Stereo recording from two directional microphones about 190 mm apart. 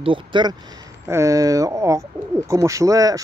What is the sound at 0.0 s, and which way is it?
Speech, 25° right (ahead or behind).